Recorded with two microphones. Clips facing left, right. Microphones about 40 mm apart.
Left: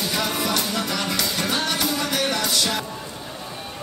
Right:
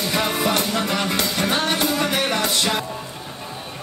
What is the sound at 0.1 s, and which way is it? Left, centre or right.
Music, right.